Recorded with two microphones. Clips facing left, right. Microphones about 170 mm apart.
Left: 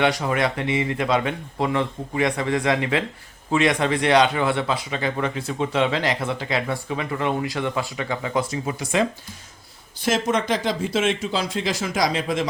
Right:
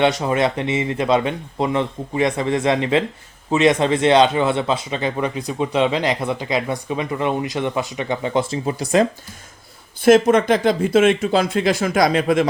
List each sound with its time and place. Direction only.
0.0 s speech: 25° right (ahead or behind)
10.0 s speech: 55° right (ahead or behind)